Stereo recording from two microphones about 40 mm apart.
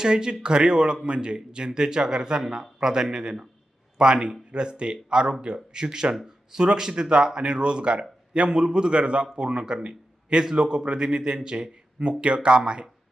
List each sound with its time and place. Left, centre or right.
0.0 s speech: centre